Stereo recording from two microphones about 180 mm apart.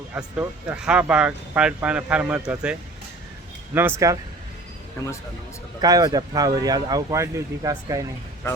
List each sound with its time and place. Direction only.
0.1 s speech: 10° right (ahead or behind)
3.8 s speech: 10° right (ahead or behind)
5.8 s speech: 20° right (ahead or behind)